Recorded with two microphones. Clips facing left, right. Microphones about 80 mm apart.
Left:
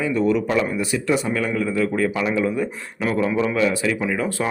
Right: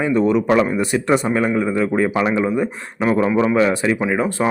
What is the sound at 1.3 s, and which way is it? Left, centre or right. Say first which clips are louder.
Speech: right 4 dB; right.